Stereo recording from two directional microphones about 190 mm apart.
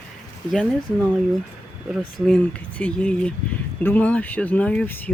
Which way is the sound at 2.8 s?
5° left (ahead or behind).